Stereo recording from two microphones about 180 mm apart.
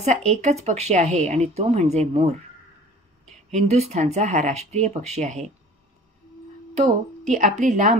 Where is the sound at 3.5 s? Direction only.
35° right (ahead or behind).